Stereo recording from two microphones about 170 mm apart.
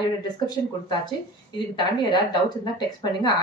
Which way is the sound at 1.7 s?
25° left (ahead or behind).